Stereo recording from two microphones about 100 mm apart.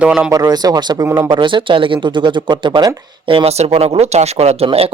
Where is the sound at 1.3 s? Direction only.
55° right (ahead or behind).